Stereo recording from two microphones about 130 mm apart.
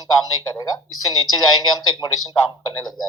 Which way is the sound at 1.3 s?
30° left (ahead or behind).